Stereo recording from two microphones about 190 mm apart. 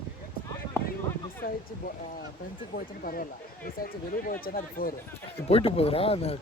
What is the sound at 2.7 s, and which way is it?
Speech, 50° left (ahead or behind).